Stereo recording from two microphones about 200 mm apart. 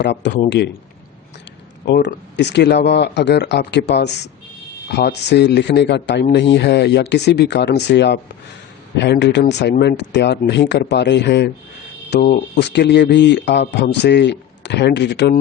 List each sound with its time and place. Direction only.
0.0 s speech: 60° left (ahead or behind)
1.8 s speech: 60° left (ahead or behind)